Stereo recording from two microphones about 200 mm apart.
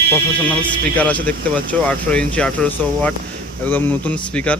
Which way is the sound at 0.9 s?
5° left (ahead or behind).